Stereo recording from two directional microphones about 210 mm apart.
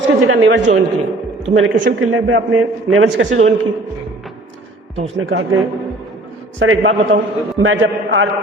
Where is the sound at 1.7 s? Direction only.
45° right (ahead or behind).